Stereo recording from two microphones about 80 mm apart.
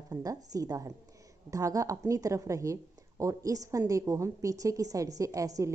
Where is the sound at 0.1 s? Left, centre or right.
Right.